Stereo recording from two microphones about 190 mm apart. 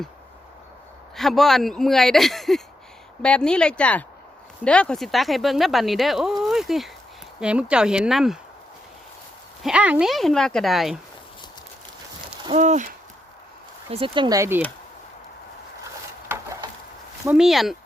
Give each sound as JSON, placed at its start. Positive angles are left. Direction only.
{"t": 1.1, "sound": "speech", "side_deg": 0}
{"t": 9.6, "sound": "speech", "side_deg": -5}
{"t": 12.5, "sound": "owl", "side_deg": -40}
{"t": 13.9, "sound": "speech", "side_deg": -30}
{"t": 16.3, "sound": "a sound", "side_deg": -15}
{"t": 17.2, "sound": "speech", "side_deg": -5}